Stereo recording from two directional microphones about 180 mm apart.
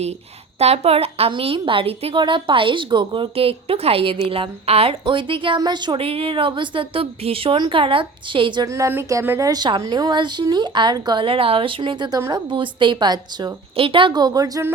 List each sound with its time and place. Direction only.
0.6 s a woman's voice: 35° right (ahead or behind); by 14.7 s 20° right (ahead or behind)